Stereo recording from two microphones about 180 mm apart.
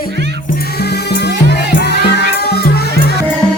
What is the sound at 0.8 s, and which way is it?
Music, 65° left (ahead or behind).